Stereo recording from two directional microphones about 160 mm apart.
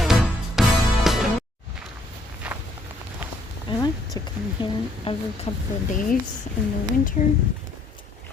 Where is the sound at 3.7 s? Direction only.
30° left (ahead or behind).